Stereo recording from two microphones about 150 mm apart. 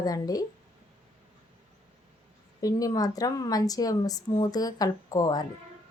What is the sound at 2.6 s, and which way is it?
Speech, 25° left (ahead or behind).